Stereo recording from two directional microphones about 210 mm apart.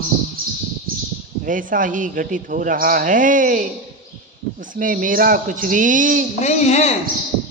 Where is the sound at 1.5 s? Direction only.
40° right (ahead or behind).